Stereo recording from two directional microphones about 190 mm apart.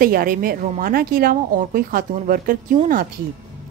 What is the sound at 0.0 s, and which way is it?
A woman's voice, 50° right (ahead or behind).